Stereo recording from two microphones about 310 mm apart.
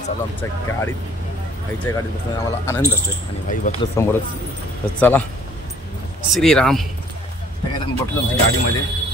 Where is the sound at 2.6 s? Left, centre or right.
Centre.